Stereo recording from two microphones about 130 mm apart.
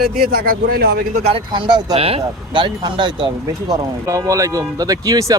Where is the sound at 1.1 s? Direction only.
50° right (ahead or behind).